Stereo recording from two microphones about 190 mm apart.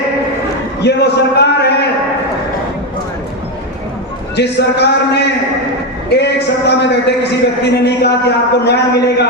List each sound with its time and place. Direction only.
0.8 s a man's voice: 60° left (ahead or behind)
4.4 s a man's voice: 60° left (ahead or behind)